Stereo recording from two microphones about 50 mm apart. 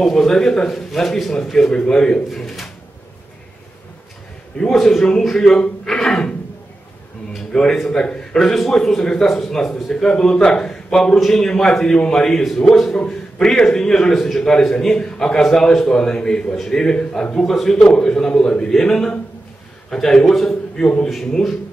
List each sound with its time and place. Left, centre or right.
0.0 s a man's voice: centre
2.4 s pigeon: centre
4.6 s a man's voice: centre
7.5 s a man's voice: centre
20.8 s a man's voice: centre
21.1 s a man's voice: centre